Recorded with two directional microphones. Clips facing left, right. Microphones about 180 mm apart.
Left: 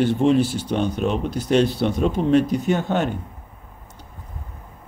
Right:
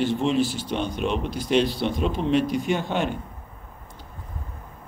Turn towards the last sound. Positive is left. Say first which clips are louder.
# left 3 dB
turn(degrees=40)  # may be behind; listen again after turning